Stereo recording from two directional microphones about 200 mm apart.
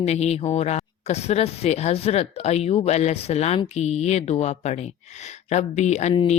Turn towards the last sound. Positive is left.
turn(degrees=30)  # may be behind; listen again after turning